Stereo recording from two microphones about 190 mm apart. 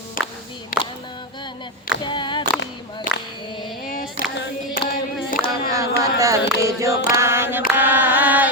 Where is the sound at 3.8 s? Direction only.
45° left (ahead or behind).